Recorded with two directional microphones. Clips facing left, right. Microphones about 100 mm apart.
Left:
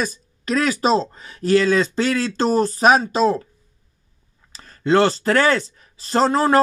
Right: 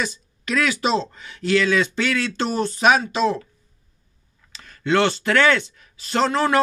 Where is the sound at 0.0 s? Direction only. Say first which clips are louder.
Left 2 dB; 40° left (ahead or behind).